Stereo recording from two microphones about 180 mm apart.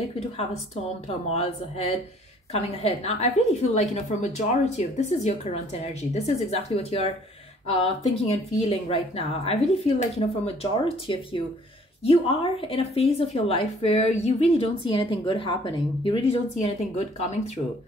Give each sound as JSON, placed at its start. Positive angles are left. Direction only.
{"t": 1.0, "sound": "a woman's voice", "side_deg": 35}